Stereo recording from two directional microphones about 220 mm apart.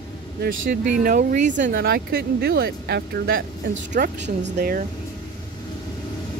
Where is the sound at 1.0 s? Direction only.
35° right (ahead or behind).